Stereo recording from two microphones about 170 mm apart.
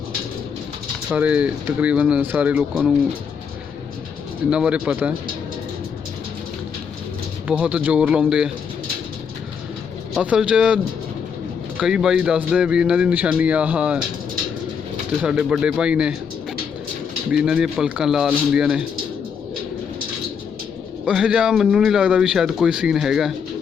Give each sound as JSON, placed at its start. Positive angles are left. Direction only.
{"t": 1.1, "sound": "speech", "side_deg": -10}
{"t": 4.4, "sound": "speech", "side_deg": -5}
{"t": 7.4, "sound": "speech", "side_deg": -10}
{"t": 10.2, "sound": "a man's voice", "side_deg": -5}
{"t": 11.8, "sound": "speech", "side_deg": -5}
{"t": 15.2, "sound": "a man's voice", "side_deg": -5}
{"t": 17.3, "sound": "a man's voice", "side_deg": -5}
{"t": 21.0, "sound": "a man's voice", "side_deg": -5}